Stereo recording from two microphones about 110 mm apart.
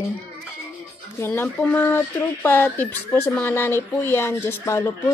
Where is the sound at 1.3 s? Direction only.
15° left (ahead or behind).